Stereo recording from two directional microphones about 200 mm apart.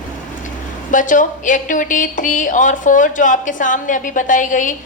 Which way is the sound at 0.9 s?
40° left (ahead or behind).